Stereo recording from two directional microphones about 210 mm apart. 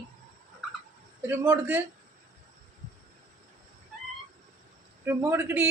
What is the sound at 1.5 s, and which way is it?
Speech, 5° right (ahead or behind).